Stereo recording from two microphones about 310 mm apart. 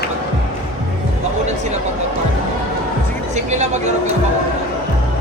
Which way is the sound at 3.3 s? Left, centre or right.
Right.